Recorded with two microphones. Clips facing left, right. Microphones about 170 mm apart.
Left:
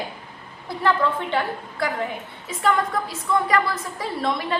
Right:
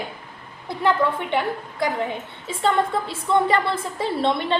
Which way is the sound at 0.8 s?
20° right (ahead or behind).